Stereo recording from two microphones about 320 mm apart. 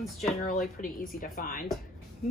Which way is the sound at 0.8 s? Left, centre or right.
Left.